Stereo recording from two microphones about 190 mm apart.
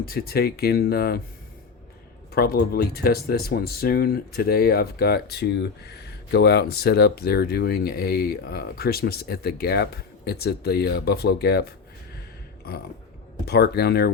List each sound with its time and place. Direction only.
0.0 s speech: 50° left (ahead or behind)
2.3 s speech: 55° left (ahead or behind)
13.4 s speech: 60° left (ahead or behind)